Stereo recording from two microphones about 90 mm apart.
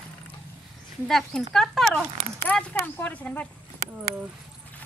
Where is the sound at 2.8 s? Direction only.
20° left (ahead or behind).